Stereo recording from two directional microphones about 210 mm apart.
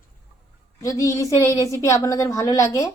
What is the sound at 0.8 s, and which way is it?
A woman's voice, 15° left (ahead or behind).